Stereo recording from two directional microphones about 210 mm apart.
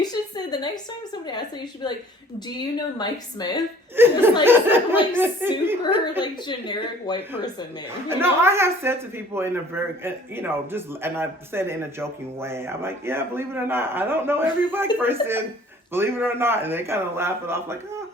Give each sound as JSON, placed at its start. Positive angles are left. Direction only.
{"t": 0.0, "sound": "a sound", "side_deg": 20}
{"t": 1.3, "sound": "speech", "side_deg": 20}
{"t": 3.9, "sound": "a man's voice", "side_deg": -10}
{"t": 6.2, "sound": "speech", "side_deg": 20}
{"t": 8.0, "sound": "a man's voice", "side_deg": -10}